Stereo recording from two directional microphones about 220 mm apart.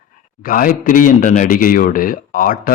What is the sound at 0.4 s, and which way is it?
Speech, 40° left (ahead or behind).